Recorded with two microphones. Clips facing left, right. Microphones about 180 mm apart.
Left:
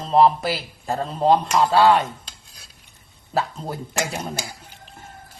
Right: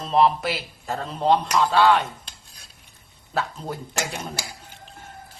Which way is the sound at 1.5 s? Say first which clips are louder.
Left 2 dB; 35° left (ahead or behind).